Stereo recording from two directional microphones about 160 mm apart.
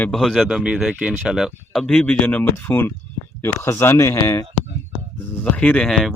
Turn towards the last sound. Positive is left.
turn(degrees=0)  # may be behind; listen again after turning